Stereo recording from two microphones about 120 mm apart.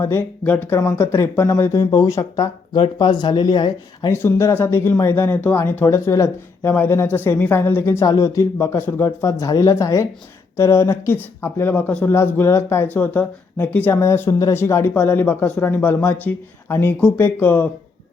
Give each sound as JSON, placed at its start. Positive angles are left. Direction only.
{"t": 0.0, "sound": "speech", "side_deg": 20}
{"t": 2.4, "sound": "speech", "side_deg": 35}
{"t": 4.1, "sound": "speech", "side_deg": 25}